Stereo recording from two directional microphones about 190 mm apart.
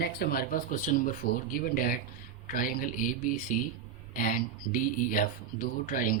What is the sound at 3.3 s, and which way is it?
Speech, 45° left (ahead or behind).